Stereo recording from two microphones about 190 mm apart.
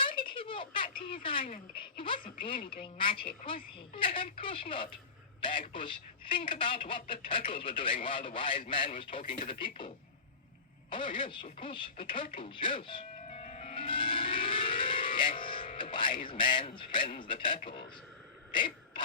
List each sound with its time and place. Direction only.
0.2 s a sound: 25° left (ahead or behind)
1.0 s speech: 25° left (ahead or behind)
2.6 s a woman's voice: 50° left (ahead or behind)
2.8 s speech: 25° left (ahead or behind)
13.2 s music: 35° left (ahead or behind)
17.2 s speech: 25° left (ahead or behind)
18.5 s a sound: 25° left (ahead or behind)